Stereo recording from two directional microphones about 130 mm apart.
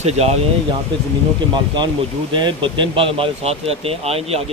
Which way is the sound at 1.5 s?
35° right (ahead or behind).